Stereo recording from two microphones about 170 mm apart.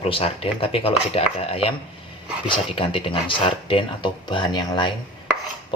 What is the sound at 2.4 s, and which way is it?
Speech, 30° left (ahead or behind).